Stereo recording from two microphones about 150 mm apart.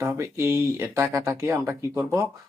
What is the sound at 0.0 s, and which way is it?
Speech, 20° right (ahead or behind).